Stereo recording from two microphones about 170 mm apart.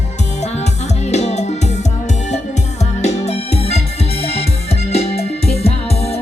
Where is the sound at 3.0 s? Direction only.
40° left (ahead or behind).